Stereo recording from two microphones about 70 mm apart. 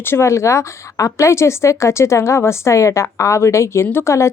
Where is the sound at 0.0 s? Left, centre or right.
Left.